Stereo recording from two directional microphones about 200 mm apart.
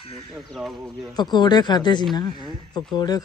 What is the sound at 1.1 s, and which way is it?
Speech, 20° left (ahead or behind).